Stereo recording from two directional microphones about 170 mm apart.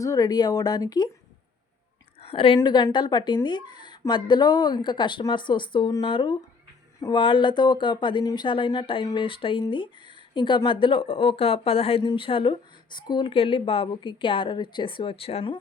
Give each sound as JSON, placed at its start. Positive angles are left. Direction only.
{"t": 0.0, "sound": "speech", "side_deg": 20}
{"t": 2.2, "sound": "a woman's voice", "side_deg": 30}